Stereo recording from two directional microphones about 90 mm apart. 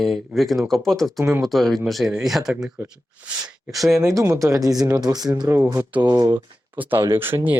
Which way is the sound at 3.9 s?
35° right (ahead or behind).